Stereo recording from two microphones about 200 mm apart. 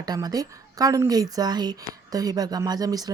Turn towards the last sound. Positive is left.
turn(degrees=-20)  # may be behind; listen again after turning